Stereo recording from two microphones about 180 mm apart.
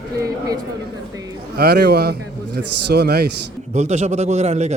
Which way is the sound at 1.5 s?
65° right (ahead or behind).